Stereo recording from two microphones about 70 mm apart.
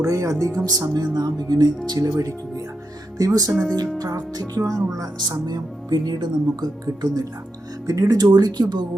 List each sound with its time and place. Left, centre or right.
0.0 s speech: right
2.0 s speech: right
6.8 s speech: right
7.9 s speech: right